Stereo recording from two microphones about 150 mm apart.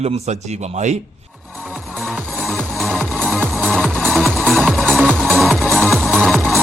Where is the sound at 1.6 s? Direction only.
10° right (ahead or behind).